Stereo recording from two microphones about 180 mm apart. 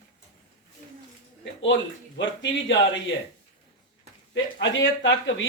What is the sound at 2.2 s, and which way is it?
Speech, 90° left.